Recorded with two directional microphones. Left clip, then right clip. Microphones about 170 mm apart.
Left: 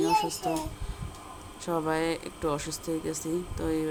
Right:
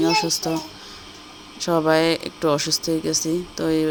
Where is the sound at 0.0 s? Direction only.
35° right (ahead or behind).